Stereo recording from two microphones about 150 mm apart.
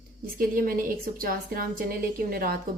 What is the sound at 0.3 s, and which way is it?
A woman's voice, 75° right (ahead or behind).